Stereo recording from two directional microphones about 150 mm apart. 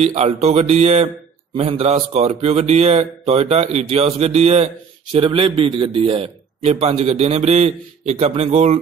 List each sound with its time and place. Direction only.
0.0 s a man's voice: 45° right (ahead or behind)